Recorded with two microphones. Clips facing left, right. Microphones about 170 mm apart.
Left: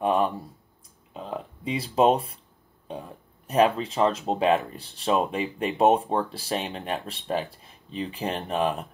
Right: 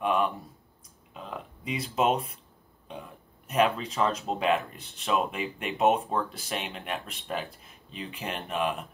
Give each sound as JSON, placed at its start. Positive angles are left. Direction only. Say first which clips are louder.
{"t": 0.0, "sound": "speech", "louder": "left 3 dB", "side_deg": 35}
{"t": 1.1, "sound": "a sound", "louder": "left 5 dB", "side_deg": 30}
{"t": 2.9, "sound": "speech", "louder": "left 5 dB", "side_deg": 35}